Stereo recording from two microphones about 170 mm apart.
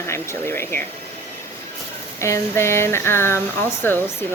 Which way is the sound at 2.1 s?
15° left (ahead or behind).